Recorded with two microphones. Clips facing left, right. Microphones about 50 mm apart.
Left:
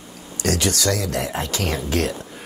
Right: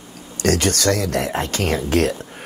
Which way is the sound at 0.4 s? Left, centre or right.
Right.